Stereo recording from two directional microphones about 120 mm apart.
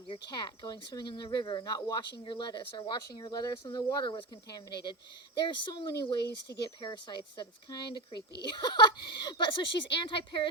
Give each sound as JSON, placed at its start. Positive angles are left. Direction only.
{"t": 0.1, "sound": "speech", "side_deg": 40}
{"t": 6.8, "sound": "speech", "side_deg": 40}